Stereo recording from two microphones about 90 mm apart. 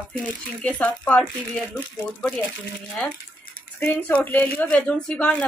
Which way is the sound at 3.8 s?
20° left (ahead or behind).